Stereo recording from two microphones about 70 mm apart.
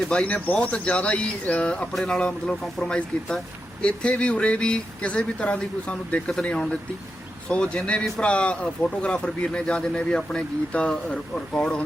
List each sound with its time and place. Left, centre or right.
0.1 s speech: centre